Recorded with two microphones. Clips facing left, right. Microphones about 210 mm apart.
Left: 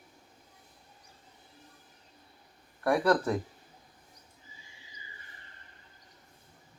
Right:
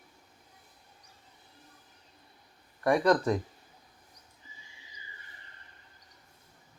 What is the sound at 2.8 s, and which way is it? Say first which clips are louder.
Speech: right 1 dB; 5° left (ahead or behind).